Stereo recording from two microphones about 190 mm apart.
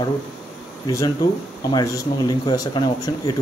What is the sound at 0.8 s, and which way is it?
Speech, 15° left (ahead or behind).